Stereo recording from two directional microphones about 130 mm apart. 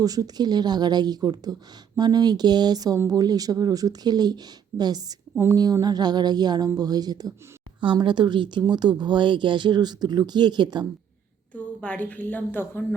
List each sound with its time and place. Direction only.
0.0 s speech: 30° right (ahead or behind)
11.8 s a woman's voice: 10° left (ahead or behind)